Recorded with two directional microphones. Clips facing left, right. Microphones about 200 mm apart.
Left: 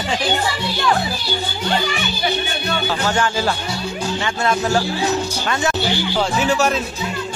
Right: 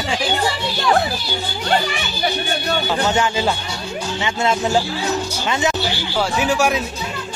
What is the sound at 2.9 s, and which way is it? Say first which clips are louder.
Speech: right 2 dB; 20° right (ahead or behind).